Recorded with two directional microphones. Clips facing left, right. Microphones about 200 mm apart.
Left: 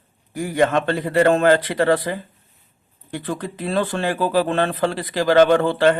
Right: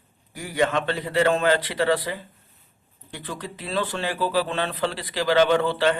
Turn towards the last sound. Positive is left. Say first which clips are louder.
# left 5 dB
turn(degrees=50)  # may be behind; listen again after turning